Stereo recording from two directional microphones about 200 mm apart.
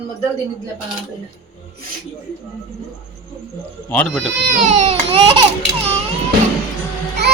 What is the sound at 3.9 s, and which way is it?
Speech, 5° left (ahead or behind).